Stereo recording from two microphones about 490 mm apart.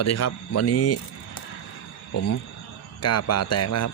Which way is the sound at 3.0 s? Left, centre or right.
Left.